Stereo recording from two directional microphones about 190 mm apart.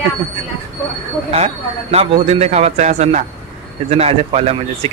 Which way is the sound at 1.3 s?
35° right (ahead or behind).